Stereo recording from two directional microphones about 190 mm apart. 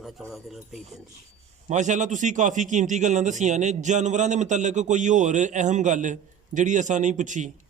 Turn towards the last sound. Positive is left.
turn(degrees=-40)  # may be behind; listen again after turning